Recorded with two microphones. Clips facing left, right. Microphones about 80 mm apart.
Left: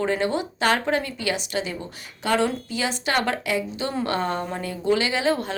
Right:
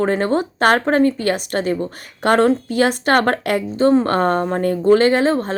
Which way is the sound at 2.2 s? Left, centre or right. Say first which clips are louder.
Right 8 dB; right.